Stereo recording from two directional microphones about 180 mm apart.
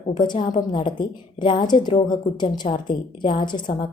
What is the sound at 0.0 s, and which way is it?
A woman's voice, 30° left (ahead or behind).